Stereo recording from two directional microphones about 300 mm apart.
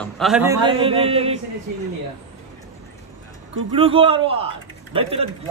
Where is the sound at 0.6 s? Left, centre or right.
Centre.